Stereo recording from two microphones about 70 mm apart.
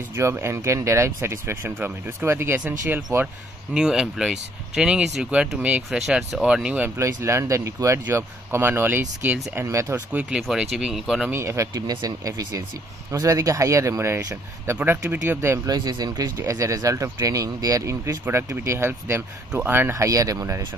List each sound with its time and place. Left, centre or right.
0.1 s speech: right
3.1 s speech: right
3.7 s speech: centre
5.9 s speech: centre
6.4 s speech: centre
7.2 s speech: right
9.7 s speech: right
10.4 s speech: centre
11.3 s speech: right
11.7 s speech: right
15.6 s speech: right
16.3 s speech: right
19.9 s speech: right